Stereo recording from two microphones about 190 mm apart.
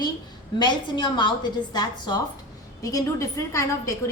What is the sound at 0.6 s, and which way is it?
A woman's voice, 25° left (ahead or behind).